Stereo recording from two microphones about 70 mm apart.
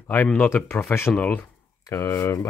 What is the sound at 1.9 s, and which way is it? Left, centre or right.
Speech, left.